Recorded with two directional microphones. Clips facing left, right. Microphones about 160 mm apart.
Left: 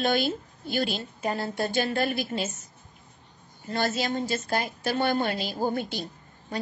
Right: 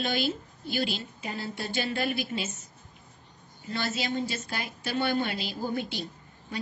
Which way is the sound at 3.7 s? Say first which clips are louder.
Left 4 dB; 45° left (ahead or behind).